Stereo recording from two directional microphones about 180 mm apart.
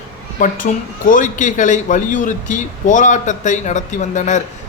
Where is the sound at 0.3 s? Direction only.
45° left (ahead or behind).